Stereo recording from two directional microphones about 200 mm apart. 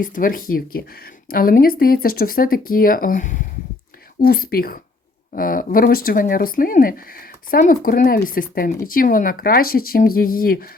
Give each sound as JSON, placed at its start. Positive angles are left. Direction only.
{"t": 0.0, "sound": "speech", "side_deg": 45}